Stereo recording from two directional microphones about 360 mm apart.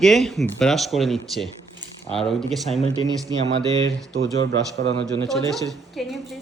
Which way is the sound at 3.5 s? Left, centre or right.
Right.